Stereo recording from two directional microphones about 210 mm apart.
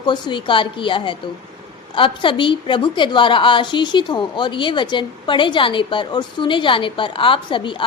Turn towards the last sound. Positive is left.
turn(degrees=25)  # may be behind; listen again after turning